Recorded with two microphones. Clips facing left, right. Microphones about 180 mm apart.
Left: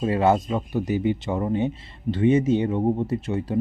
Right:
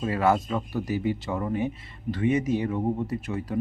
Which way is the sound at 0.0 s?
25° left (ahead or behind).